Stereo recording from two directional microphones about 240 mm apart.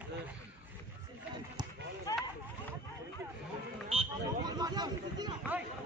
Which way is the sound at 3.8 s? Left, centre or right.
Right.